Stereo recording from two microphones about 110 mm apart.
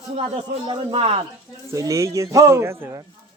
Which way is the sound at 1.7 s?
30° right (ahead or behind).